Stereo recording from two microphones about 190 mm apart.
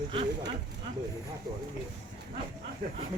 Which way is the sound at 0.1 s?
30° right (ahead or behind).